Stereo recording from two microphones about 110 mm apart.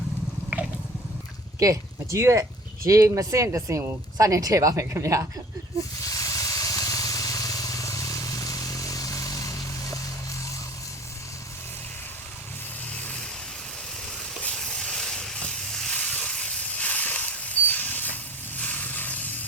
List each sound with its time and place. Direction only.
1.5 s speech: 30° right (ahead or behind)
6.0 s vehicle: 30° left (ahead or behind)
12.9 s vehicle: 10° left (ahead or behind)
14.4 s a sound: 5° left (ahead or behind)